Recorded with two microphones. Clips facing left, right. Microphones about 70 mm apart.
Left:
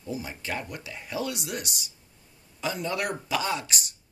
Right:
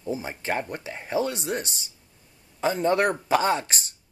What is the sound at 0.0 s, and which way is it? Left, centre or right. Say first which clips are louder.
Speech: right 4 dB; right.